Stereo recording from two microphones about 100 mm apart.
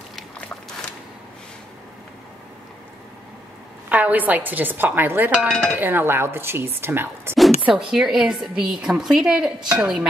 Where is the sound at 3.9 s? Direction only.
15° right (ahead or behind).